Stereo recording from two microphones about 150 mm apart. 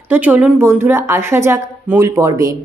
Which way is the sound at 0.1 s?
10° right (ahead or behind).